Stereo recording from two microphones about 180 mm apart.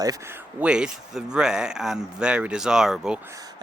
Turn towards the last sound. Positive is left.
turn(degrees=-5)  # may be behind; listen again after turning